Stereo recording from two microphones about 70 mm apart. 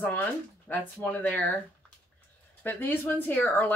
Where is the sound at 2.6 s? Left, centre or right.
Left.